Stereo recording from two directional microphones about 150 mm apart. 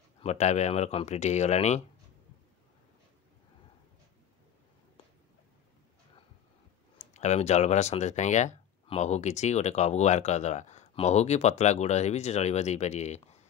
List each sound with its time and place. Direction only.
0.2 s speech: 50° left (ahead or behind)
7.2 s speech: 50° left (ahead or behind)